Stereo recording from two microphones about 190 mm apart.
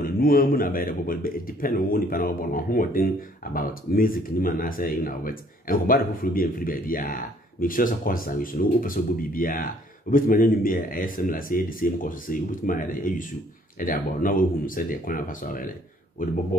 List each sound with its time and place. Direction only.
0.0 s speech: 50° left (ahead or behind)